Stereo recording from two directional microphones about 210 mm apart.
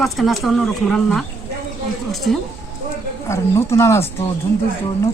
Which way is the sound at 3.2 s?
15° left (ahead or behind).